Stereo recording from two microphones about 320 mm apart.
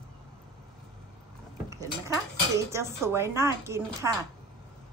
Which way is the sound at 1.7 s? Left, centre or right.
Centre.